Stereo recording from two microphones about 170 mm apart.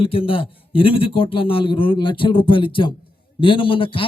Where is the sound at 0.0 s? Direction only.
30° left (ahead or behind).